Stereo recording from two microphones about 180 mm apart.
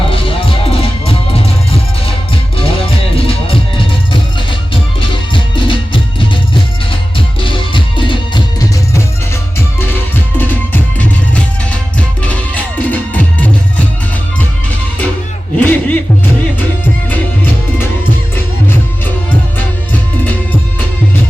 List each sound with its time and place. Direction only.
0.1 s music: 30° left (ahead or behind)
2.6 s music: 30° left (ahead or behind)
9.8 s music: 10° left (ahead or behind)
19.3 s music: 10° left (ahead or behind)